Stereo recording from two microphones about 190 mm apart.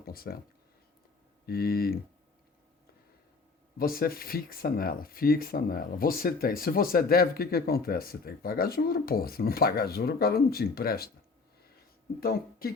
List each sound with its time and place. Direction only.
0.0 s a sound: 50° left (ahead or behind)
1.5 s speech: 50° left (ahead or behind)
3.8 s speech: 50° left (ahead or behind)
12.2 s speech: 50° left (ahead or behind)